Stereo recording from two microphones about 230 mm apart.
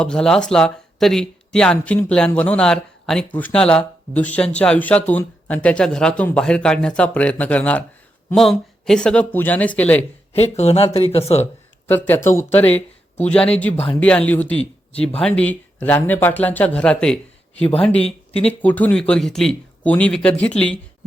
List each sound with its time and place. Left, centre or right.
0.0 s speech: centre
10.3 s speech: left
11.9 s speech: centre